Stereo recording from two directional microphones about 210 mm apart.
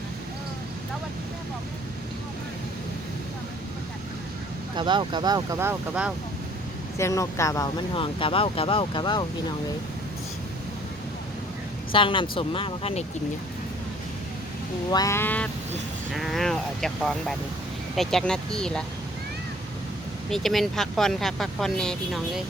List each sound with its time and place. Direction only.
4.8 s speech: 20° right (ahead or behind); by 6.1 s 5° right (ahead or behind)
7.0 s speech: 15° left (ahead or behind)
11.9 s speech: 25° left (ahead or behind)
14.8 s duck: 15° left (ahead or behind)
16.1 s speech: centre (ahead or behind)
20.3 s speech: centre (ahead or behind)